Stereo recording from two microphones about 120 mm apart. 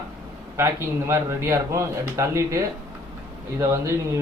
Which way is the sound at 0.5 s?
25° right (ahead or behind).